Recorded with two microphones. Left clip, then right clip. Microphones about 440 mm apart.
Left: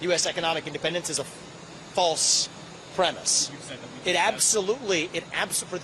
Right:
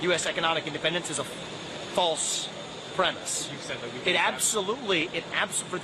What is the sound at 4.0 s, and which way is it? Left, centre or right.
Speech, left.